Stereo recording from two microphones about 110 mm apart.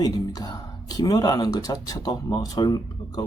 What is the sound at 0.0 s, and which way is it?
Speech, 35° left (ahead or behind).